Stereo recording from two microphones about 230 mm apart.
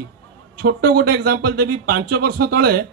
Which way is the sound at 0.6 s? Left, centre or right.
Right.